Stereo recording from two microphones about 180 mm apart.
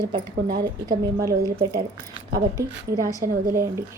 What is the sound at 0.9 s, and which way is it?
A woman's voice, 20° right (ahead or behind).